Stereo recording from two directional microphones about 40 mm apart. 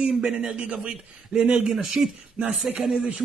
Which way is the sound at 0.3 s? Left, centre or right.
Centre.